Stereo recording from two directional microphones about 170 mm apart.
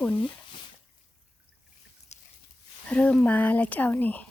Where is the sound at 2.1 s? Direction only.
40° left (ahead or behind).